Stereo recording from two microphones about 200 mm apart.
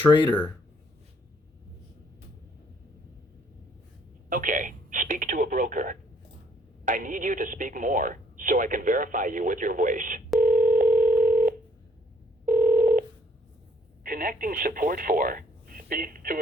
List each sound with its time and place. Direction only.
0.3 s speech: 10° left (ahead or behind)
4.3 s speech: 40° right (ahead or behind)
10.4 s dial tone: 45° right (ahead or behind)
12.5 s telephone: 45° right (ahead or behind)
14.0 s speech: 45° right (ahead or behind)